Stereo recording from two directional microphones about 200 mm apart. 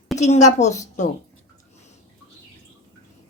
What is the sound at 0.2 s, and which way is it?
Speech, 35° left (ahead or behind).